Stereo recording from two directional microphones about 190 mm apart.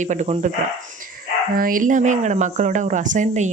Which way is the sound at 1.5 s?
45° right (ahead or behind).